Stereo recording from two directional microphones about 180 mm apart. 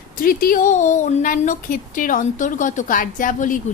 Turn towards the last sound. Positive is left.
turn(degrees=45)  # may be behind; listen again after turning